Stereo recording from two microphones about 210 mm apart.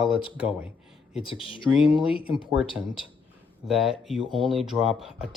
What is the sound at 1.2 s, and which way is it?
Speech, 25° left (ahead or behind).